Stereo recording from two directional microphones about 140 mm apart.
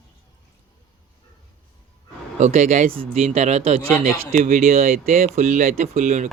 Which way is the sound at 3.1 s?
55° right (ahead or behind).